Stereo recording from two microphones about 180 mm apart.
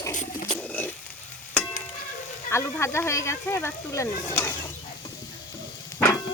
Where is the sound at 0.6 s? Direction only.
10° left (ahead or behind).